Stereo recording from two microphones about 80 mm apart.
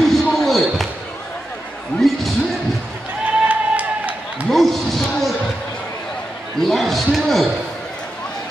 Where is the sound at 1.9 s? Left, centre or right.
Centre.